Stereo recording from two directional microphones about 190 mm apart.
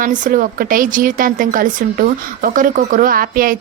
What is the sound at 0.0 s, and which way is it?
Speech, 45° right (ahead or behind).